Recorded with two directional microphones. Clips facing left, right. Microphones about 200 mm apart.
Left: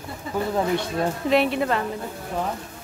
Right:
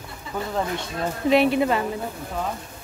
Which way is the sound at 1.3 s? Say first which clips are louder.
Right 3 dB; centre (ahead or behind).